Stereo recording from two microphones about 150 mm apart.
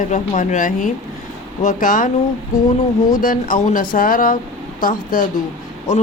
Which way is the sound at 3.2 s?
65° left (ahead or behind).